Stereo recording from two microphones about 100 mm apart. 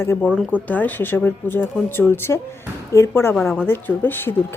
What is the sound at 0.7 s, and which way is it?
Speech, 15° left (ahead or behind).